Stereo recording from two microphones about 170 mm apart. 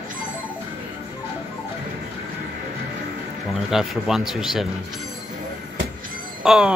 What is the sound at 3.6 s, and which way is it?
Speech, centre (ahead or behind).